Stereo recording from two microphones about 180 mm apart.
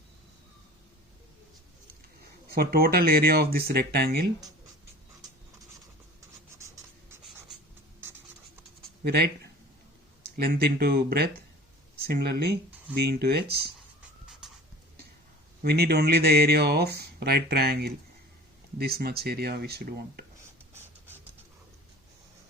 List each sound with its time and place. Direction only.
2.5 s speech: 60° right (ahead or behind)
9.0 s speech: 65° right (ahead or behind)
10.3 s speech: 55° right (ahead or behind)
14.4 s a sound: 5° right (ahead or behind)
15.6 s speech: 60° right (ahead or behind)